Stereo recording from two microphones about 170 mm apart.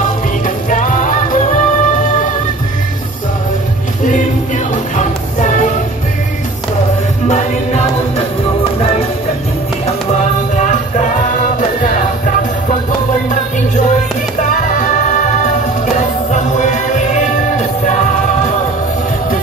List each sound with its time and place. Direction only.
0.7 s music: 50° left (ahead or behind)
4.9 s music: 45° left (ahead or behind)
7.2 s music: 45° left (ahead or behind)
10.6 s music: 45° left (ahead or behind)
14.5 s music: 50° left (ahead or behind)